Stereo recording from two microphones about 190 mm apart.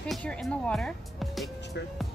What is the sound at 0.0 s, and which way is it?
Speech, 5° left (ahead or behind).